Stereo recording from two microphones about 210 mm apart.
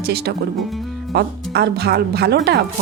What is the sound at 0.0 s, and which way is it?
Speech, 50° right (ahead or behind).